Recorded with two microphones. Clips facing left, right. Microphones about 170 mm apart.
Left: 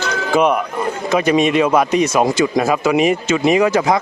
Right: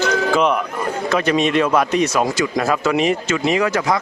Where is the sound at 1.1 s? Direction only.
10° left (ahead or behind).